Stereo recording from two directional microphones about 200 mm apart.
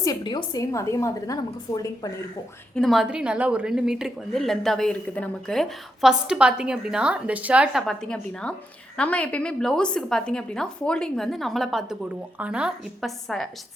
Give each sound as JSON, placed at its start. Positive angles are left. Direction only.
{"t": 0.0, "sound": "a woman's voice", "side_deg": 20}
{"t": 2.7, "sound": "a woman's voice", "side_deg": 0}